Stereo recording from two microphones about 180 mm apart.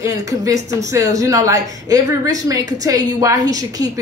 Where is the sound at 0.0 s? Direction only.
20° right (ahead or behind).